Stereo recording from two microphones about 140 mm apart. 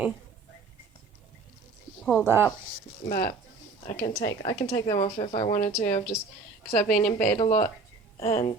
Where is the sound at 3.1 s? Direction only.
90° left.